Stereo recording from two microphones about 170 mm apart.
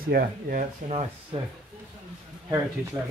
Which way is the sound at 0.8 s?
35° right (ahead or behind).